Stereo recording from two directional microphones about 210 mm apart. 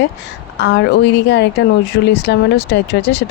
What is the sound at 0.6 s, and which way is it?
Speech, 55° left (ahead or behind).